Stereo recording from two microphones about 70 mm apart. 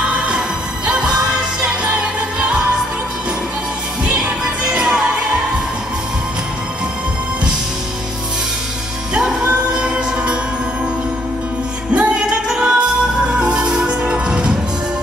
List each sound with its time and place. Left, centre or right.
0.0 s music: centre
2.3 s music: centre
4.6 s music: centre
9.1 s music: centre
11.9 s music: centre